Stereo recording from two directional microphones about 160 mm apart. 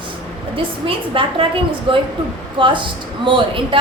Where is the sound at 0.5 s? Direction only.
35° right (ahead or behind).